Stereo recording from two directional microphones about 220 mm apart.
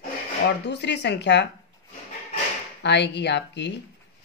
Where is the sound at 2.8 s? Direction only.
50° left (ahead or behind).